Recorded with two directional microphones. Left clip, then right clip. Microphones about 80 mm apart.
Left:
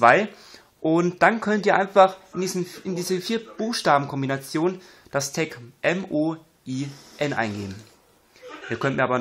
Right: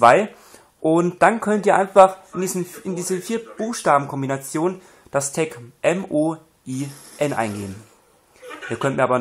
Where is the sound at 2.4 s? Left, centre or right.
Right.